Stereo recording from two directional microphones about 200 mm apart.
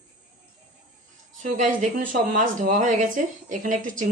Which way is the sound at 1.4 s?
40° right (ahead or behind).